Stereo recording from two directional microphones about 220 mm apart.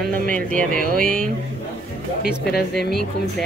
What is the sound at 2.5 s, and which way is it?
Speech, 50° left (ahead or behind).